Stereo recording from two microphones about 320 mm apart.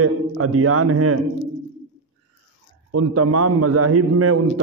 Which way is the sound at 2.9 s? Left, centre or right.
Right.